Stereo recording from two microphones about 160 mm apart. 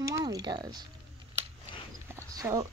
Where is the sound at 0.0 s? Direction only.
20° right (ahead or behind).